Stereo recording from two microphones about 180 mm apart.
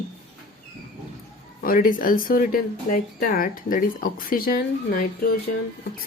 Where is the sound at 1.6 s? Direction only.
50° left (ahead or behind).